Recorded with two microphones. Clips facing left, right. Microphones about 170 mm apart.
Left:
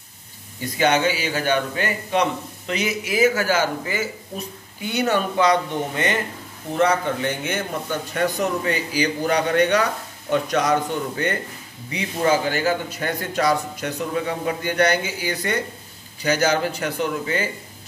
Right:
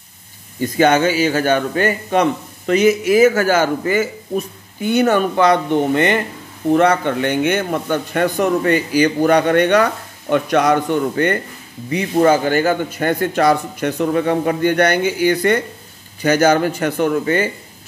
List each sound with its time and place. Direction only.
0.7 s a man's voice: 50° right (ahead or behind)